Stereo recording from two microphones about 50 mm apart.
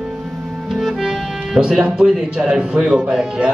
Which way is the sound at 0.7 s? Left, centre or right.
Centre.